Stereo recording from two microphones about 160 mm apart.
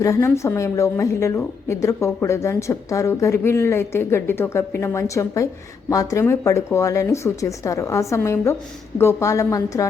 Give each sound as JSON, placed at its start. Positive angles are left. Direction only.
{"t": 0.0, "sound": "a woman's voice", "side_deg": 20}